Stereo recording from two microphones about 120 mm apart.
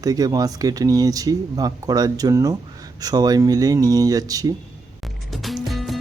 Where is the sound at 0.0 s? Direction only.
30° right (ahead or behind).